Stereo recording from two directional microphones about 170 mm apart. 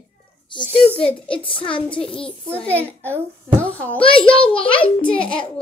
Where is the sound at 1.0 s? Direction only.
30° left (ahead or behind).